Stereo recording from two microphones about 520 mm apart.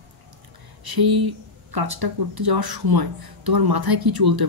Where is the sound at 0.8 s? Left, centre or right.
Right.